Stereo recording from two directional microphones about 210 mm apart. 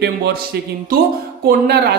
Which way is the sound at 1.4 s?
50° right (ahead or behind).